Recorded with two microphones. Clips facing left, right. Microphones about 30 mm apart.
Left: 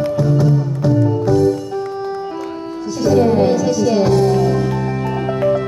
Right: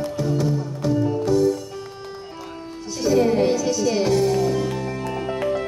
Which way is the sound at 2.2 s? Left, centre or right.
Left.